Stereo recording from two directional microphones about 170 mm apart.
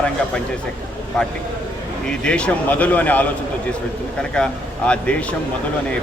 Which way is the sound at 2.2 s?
5° left (ahead or behind).